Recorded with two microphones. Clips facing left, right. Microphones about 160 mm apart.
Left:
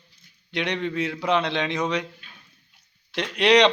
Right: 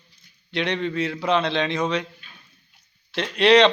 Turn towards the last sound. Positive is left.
turn(degrees=15)  # may be behind; listen again after turning